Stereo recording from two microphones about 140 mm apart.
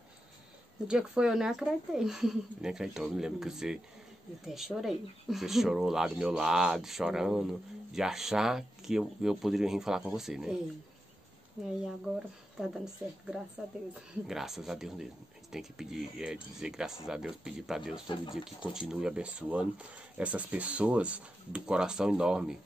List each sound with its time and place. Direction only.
0.8 s speech: 5° right (ahead or behind)
18.0 s speech: 35° left (ahead or behind)
18.3 s speech: 5° right (ahead or behind)